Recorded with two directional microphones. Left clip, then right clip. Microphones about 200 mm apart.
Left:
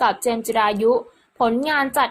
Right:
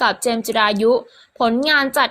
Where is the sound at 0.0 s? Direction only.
25° right (ahead or behind).